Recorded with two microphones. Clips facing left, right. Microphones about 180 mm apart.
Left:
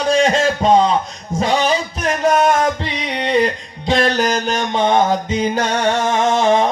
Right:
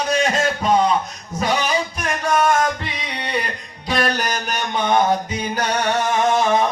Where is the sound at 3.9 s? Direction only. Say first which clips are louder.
Left 5 dB; 25° left (ahead or behind).